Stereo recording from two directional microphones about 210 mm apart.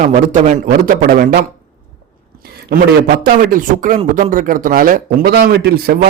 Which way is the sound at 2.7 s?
45° right (ahead or behind).